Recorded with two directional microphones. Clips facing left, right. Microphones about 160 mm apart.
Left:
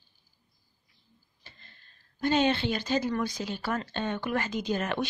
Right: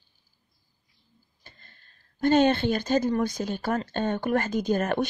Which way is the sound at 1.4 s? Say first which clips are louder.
Right 2 dB; 45° right (ahead or behind).